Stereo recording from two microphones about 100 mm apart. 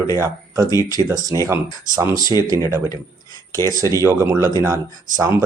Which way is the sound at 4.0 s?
30° right (ahead or behind).